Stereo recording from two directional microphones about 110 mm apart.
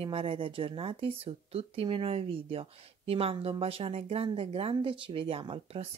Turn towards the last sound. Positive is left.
turn(degrees=-60)  # may be behind; listen again after turning